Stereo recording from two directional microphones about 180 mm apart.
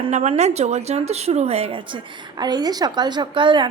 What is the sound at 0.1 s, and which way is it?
A woman's voice, 35° right (ahead or behind).